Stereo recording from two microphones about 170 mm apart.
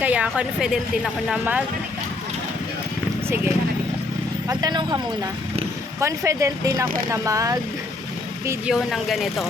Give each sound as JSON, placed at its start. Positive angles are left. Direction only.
{"t": 0.0, "sound": "speech", "side_deg": -10}
{"t": 4.4, "sound": "speech", "side_deg": -25}
{"t": 8.4, "sound": "speech", "side_deg": -5}